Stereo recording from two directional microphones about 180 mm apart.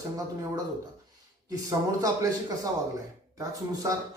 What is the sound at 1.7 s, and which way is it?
Speech, 20° right (ahead or behind).